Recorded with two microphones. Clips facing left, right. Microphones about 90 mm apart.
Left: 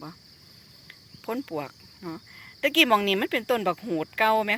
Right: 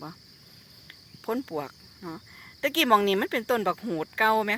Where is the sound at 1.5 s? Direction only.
20° right (ahead or behind).